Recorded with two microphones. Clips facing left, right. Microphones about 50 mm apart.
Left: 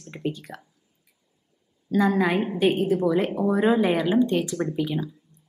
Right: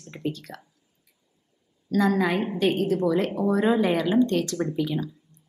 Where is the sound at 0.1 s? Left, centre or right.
Centre.